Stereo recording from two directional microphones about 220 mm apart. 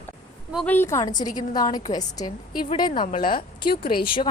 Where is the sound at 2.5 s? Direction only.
40° left (ahead or behind).